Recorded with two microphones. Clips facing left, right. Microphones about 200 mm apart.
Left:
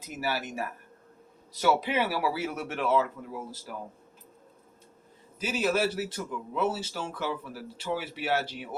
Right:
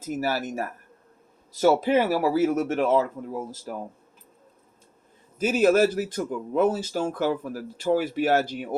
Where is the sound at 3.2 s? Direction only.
30° right (ahead or behind).